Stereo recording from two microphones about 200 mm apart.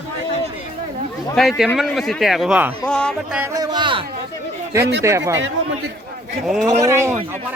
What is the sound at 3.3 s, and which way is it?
Speech, 15° right (ahead or behind).